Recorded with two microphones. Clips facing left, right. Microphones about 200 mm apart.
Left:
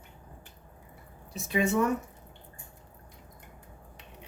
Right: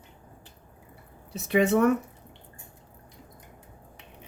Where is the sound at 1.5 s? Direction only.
65° right (ahead or behind).